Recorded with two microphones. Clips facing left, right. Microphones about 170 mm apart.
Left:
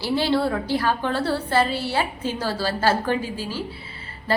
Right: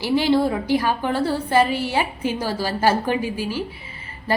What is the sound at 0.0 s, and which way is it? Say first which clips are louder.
A woman's voice: right 3 dB; 15° right (ahead or behind).